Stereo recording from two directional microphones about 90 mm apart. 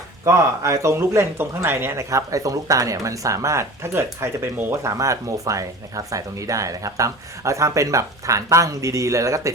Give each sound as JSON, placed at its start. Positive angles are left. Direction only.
{"t": 0.3, "sound": "speech", "side_deg": -35}